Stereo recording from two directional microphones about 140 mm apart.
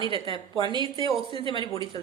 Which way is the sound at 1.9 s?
30° left (ahead or behind).